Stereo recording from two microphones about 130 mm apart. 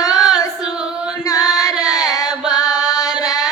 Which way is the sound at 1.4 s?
5° right (ahead or behind).